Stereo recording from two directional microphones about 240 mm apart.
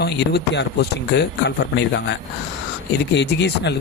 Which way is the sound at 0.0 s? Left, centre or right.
Left.